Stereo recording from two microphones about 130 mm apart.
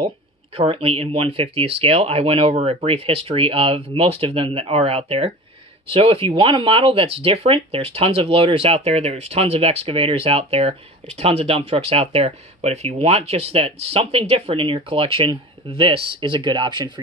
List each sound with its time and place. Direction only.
0.6 s speech: 50° right (ahead or behind)